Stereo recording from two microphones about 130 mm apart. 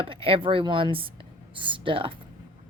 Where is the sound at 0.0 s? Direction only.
45° right (ahead or behind).